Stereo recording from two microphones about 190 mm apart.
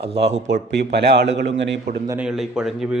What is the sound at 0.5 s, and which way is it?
A man's voice, 65° right (ahead or behind).